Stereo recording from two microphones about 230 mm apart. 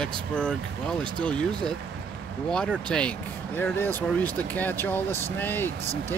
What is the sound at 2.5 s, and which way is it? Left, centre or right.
Speech, centre.